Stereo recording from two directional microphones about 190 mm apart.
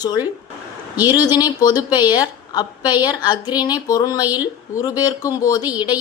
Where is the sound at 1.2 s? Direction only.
20° left (ahead or behind).